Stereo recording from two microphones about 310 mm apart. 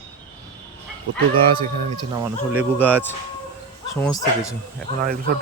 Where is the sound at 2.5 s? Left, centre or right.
Centre.